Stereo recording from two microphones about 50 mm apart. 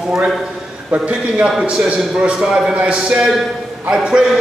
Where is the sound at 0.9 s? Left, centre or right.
Right.